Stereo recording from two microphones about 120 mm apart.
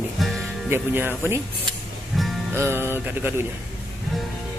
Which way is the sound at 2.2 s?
Centre (ahead or behind).